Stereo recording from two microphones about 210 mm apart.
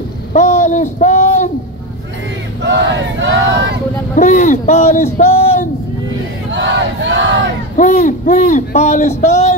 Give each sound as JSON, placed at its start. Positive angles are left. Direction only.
{"t": 0.3, "sound": "a sound", "side_deg": 35}
{"t": 2.6, "sound": "battle cry", "side_deg": -55}
{"t": 4.1, "sound": "a man's voice", "side_deg": 35}
{"t": 6.5, "sound": "battle cry", "side_deg": -60}
{"t": 7.7, "sound": "a man's voice", "side_deg": 35}
{"t": 9.2, "sound": "a sound", "side_deg": 30}